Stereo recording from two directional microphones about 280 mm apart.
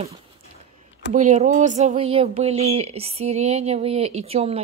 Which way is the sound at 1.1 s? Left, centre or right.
Right.